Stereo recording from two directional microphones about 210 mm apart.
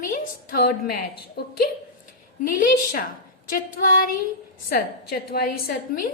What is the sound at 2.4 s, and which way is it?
A woman's voice, 40° left (ahead or behind).